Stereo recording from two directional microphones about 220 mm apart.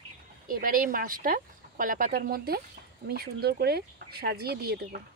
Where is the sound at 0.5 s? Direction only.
40° right (ahead or behind).